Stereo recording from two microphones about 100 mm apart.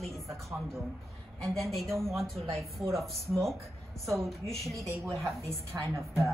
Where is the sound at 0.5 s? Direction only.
15° right (ahead or behind).